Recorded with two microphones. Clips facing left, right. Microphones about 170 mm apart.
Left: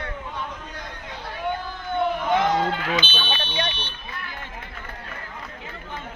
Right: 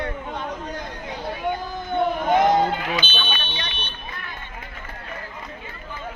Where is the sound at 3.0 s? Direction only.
50° right (ahead or behind).